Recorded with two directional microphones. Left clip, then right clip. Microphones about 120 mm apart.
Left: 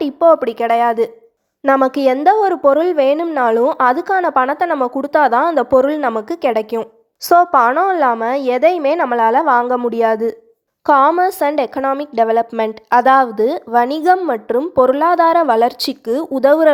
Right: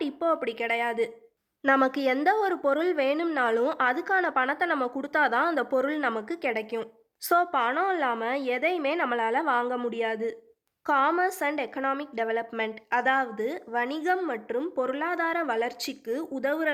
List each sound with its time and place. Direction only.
0.0 s speech: 40° left (ahead or behind)
1.9 s a woman's voice: 30° left (ahead or behind)
3.6 s a woman's voice: 5° left (ahead or behind)
3.8 s a woman's voice: 35° left (ahead or behind)
6.7 s a woman's voice: 30° left (ahead or behind)
9.9 s a woman's voice: 45° left (ahead or behind)